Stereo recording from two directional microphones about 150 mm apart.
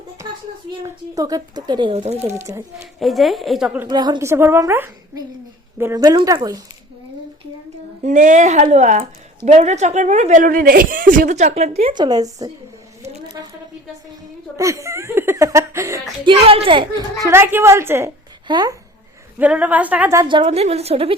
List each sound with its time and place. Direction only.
0.8 s a child's voice: 25° right (ahead or behind); by 2.3 s 45° right (ahead or behind)
2.4 s a child's voice: 25° right (ahead or behind)
2.7 s a woman's voice: centre (ahead or behind)
3.8 s a woman's voice: 30° right (ahead or behind)
8.0 s a woman's voice: 55° right (ahead or behind)
11.9 s a child's voice: 25° right (ahead or behind)
13.0 s a sound: 25° right (ahead or behind)
14.5 s a child's voice: 20° right (ahead or behind)
16.2 s a woman's voice: 40° right (ahead or behind)
17.2 s a woman's voice: 15° right (ahead or behind)
18.4 s a child's voice: 30° right (ahead or behind)
19.4 s a woman's voice: 10° right (ahead or behind)
20.2 s a woman's voice: 35° right (ahead or behind)